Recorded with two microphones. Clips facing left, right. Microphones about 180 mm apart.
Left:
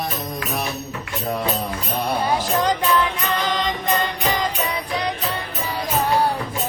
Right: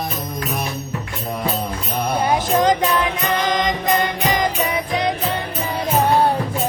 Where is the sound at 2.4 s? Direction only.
20° right (ahead or behind).